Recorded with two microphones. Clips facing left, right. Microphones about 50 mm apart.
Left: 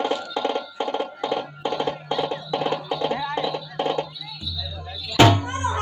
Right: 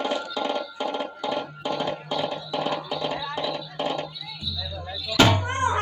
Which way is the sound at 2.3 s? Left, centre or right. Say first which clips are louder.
Left 3 dB; left.